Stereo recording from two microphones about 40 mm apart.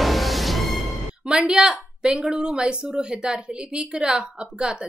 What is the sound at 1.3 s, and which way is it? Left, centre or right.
A woman's voice, centre.